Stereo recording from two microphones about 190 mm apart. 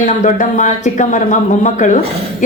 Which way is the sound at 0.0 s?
40° left (ahead or behind).